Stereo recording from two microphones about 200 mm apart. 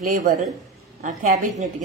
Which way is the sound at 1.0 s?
40° right (ahead or behind).